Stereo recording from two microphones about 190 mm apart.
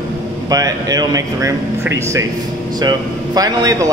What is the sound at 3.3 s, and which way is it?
Speech, 20° right (ahead or behind).